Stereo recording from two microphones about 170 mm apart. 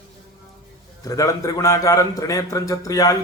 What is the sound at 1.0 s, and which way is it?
A man's voice, 20° left (ahead or behind).